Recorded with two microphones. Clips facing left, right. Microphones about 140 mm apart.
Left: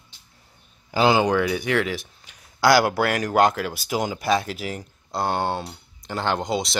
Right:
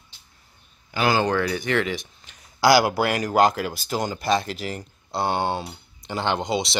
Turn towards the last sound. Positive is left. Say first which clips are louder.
# even
turn(degrees=0)  # may be behind; listen again after turning